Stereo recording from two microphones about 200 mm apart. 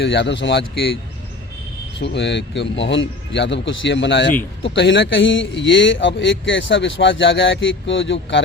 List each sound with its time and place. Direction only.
0.0 s speech: 60° left (ahead or behind)
2.0 s speech: 60° left (ahead or behind)